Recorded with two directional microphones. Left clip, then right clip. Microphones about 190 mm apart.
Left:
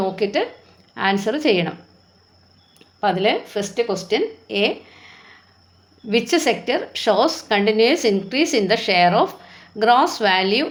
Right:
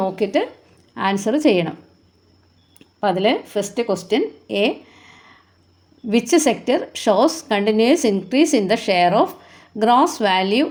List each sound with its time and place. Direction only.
0.0 s a woman's voice: 45° right (ahead or behind)
2.7 s a woman's voice: 50° right (ahead or behind)